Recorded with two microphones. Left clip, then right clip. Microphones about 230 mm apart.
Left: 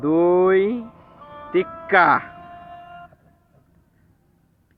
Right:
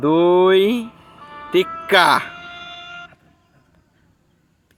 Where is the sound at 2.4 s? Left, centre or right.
Centre.